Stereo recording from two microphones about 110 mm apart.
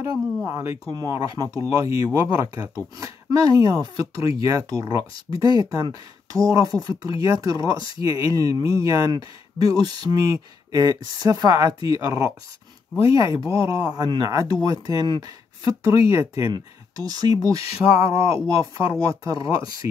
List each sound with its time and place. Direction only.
0.4 s speech: 25° right (ahead or behind)
0.9 s speech: 35° right (ahead or behind)